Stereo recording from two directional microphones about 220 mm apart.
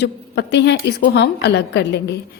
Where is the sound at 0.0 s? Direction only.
50° left (ahead or behind).